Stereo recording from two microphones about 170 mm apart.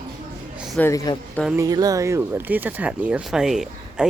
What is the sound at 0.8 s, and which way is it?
Speech, 20° left (ahead or behind).